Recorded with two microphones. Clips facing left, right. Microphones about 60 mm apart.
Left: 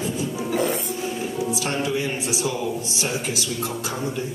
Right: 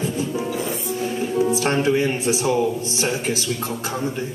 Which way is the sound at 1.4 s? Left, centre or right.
Right.